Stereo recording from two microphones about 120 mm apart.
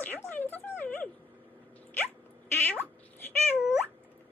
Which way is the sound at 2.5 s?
15° left (ahead or behind).